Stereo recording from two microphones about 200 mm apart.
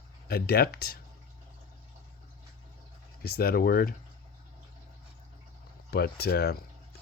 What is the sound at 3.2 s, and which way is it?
Speech, 50° left (ahead or behind).